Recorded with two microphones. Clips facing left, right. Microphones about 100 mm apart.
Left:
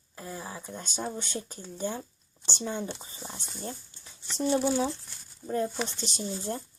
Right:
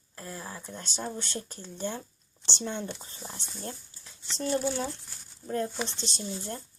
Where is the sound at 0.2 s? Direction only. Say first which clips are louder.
Left 1 dB; 10° left (ahead or behind).